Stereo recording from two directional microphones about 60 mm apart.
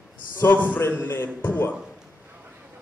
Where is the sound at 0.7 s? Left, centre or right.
Left.